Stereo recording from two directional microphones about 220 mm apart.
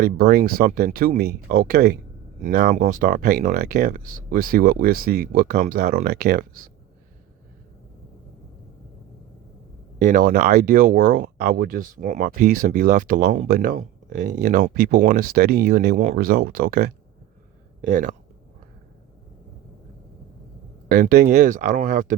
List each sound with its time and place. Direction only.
0.0 s speech: 40° right (ahead or behind)
10.0 s speech: 40° right (ahead or behind)
20.8 s speech: 40° right (ahead or behind)